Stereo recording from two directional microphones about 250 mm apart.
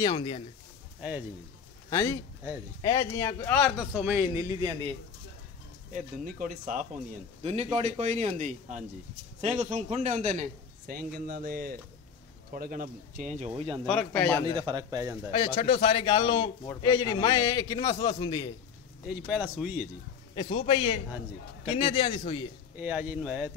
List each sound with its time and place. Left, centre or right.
0.0 s a man's voice: centre
1.9 s a man's voice: centre
3.9 s a man's voice: centre
5.9 s a man's voice: right
13.8 s speech: centre
14.4 s a man's voice: centre
15.3 s a man's voice: left
19.0 s speech: centre
20.3 s a man's voice: left
22.8 s speech: centre